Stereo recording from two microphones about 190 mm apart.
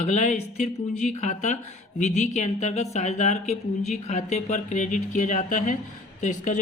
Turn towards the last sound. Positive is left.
turn(degrees=40)  # may be behind; listen again after turning